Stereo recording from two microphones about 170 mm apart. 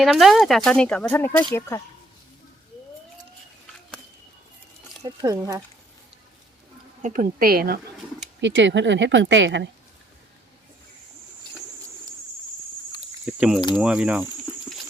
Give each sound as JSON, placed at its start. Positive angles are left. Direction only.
{"t": 0.0, "sound": "speech", "side_deg": 0}
{"t": 5.0, "sound": "speech", "side_deg": -20}
{"t": 7.0, "sound": "a woman's voice", "side_deg": -50}
{"t": 8.4, "sound": "speech", "side_deg": -90}
{"t": 13.7, "sound": "speech", "side_deg": -5}